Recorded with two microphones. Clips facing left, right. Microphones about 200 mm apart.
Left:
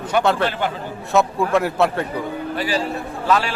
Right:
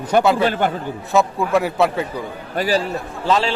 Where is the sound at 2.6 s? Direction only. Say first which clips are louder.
Right 5 dB; 40° right (ahead or behind).